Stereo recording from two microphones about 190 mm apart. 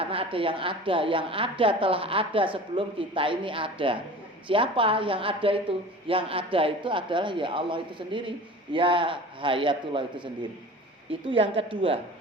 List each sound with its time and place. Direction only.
0.0 s a woman's voice: 30° right (ahead or behind)
11.3 s a woman's voice: 25° right (ahead or behind)